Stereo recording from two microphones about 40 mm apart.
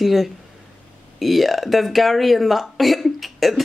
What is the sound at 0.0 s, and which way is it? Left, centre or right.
Speech, centre.